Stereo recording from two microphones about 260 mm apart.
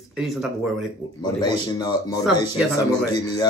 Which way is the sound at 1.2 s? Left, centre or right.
Centre.